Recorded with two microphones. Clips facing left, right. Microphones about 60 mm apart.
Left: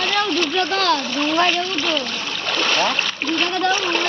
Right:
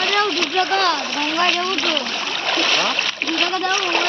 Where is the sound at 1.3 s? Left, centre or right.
Centre.